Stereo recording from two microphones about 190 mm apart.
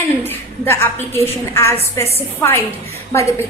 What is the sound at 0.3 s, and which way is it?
Speech, 10° left (ahead or behind).